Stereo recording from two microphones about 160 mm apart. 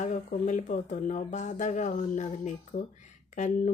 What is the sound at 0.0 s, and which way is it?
Speech, 50° left (ahead or behind).